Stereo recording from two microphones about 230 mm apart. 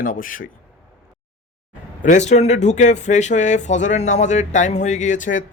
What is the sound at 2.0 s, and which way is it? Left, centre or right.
Speech, left.